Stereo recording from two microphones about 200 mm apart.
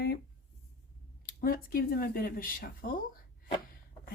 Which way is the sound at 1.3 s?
45° left (ahead or behind).